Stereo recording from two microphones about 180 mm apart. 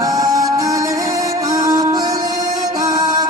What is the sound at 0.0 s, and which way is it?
Music, 20° right (ahead or behind).